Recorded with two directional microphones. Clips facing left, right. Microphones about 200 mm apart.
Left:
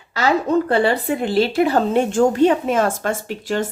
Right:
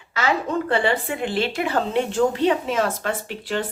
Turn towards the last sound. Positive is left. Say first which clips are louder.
# left 4 dB
turn(degrees=45)  # may be behind; listen again after turning